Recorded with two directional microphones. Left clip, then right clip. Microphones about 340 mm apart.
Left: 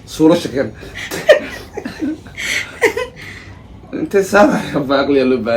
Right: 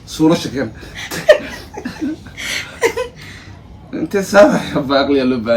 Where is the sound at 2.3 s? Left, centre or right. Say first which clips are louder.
Left 3 dB; centre.